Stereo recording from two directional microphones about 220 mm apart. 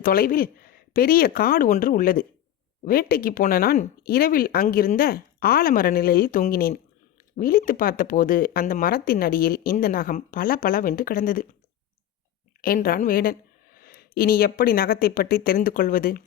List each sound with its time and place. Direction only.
0.0 s speech: 40° left (ahead or behind)
12.6 s speech: 40° left (ahead or behind)